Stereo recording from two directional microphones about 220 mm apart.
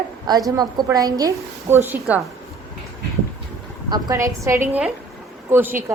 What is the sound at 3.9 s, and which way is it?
Speech, 15° right (ahead or behind).